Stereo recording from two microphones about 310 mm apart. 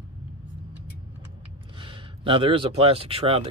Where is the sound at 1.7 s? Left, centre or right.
Centre.